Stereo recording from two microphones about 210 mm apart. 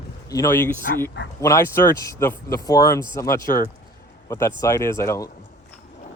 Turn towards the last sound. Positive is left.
turn(degrees=15)  # may be behind; listen again after turning